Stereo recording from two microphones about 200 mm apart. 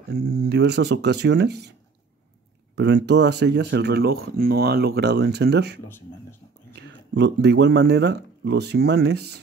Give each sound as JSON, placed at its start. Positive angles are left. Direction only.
{"t": 0.1, "sound": "speech", "side_deg": -55}
{"t": 2.7, "sound": "speech", "side_deg": -60}